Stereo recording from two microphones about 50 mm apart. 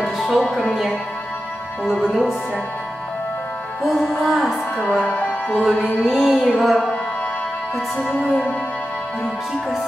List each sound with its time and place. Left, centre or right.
0.0 s music: centre
2.0 s music: centre
3.8 s music: centre
5.0 s speech: left
5.6 s music: centre